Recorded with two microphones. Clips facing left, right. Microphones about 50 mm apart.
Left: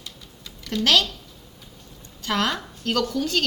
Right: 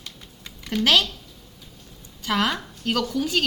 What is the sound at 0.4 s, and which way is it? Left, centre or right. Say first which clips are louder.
Typing: right 1 dB; right.